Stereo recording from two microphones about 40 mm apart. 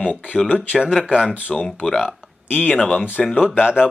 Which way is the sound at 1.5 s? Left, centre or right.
Centre.